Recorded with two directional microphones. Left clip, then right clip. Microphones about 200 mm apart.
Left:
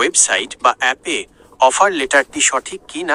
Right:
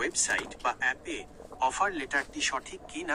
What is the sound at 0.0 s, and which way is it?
Speech, 50° left (ahead or behind).